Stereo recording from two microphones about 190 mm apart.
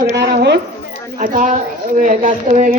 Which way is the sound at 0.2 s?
65° right (ahead or behind).